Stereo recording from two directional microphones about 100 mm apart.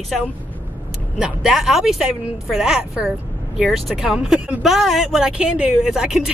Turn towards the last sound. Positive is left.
turn(degrees=-5)  # may be behind; listen again after turning